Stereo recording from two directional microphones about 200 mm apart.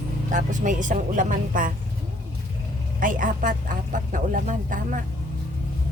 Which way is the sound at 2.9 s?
40° right (ahead or behind).